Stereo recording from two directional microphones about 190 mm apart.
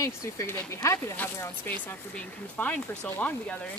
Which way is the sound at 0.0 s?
15° left (ahead or behind).